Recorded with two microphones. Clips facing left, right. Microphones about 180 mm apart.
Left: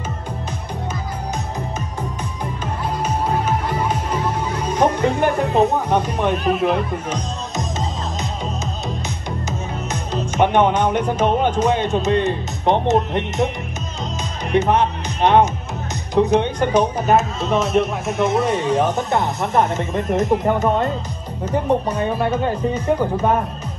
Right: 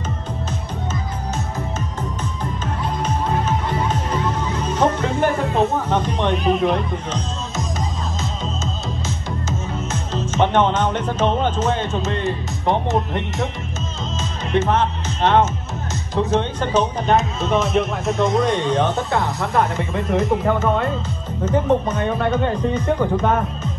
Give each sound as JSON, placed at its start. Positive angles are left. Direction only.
{"t": 2.6, "sound": "music", "side_deg": 10}
{"t": 9.0, "sound": "speech", "side_deg": 15}
{"t": 14.5, "sound": "speech", "side_deg": 15}
{"t": 21.9, "sound": "speech", "side_deg": 5}